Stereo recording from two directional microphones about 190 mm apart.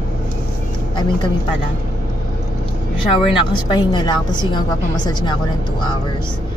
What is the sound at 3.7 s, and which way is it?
A woman's voice, 25° left (ahead or behind).